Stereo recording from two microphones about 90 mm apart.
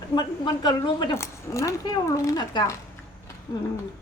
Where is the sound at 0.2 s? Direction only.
60° left (ahead or behind).